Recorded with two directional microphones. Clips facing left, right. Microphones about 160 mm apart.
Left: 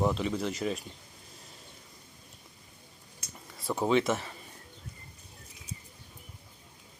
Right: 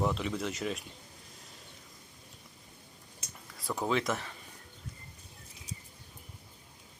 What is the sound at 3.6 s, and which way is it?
Speech, 25° left (ahead or behind).